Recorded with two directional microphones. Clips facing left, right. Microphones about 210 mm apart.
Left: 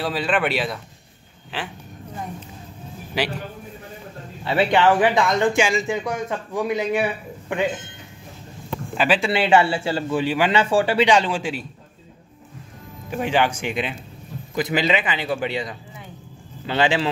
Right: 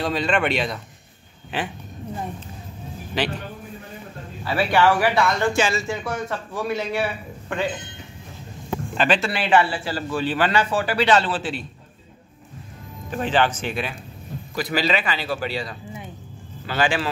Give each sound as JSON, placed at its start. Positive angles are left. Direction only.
{"t": 0.0, "sound": "speech", "side_deg": 5}
{"t": 1.5, "sound": "speech", "side_deg": -20}
{"t": 3.1, "sound": "speech", "side_deg": 10}
{"t": 4.5, "sound": "speech", "side_deg": 20}
{"t": 8.9, "sound": "speech", "side_deg": 5}
{"t": 9.3, "sound": "a man's voice", "side_deg": 25}
{"t": 10.6, "sound": "a man's voice", "side_deg": 30}
{"t": 11.1, "sound": "speech", "side_deg": 15}
{"t": 13.1, "sound": "a man's voice", "side_deg": 10}